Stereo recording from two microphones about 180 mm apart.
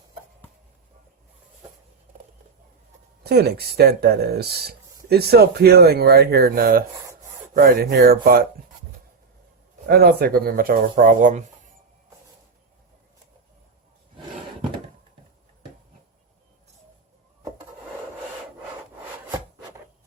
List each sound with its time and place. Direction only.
3.2 s speech: 60° right (ahead or behind)
9.8 s speech: 60° right (ahead or behind)